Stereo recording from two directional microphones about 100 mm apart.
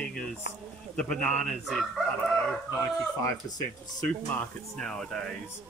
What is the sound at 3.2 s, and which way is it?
Speech, 35° left (ahead or behind).